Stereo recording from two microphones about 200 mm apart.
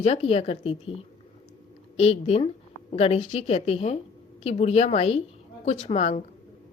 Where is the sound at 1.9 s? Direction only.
30° left (ahead or behind).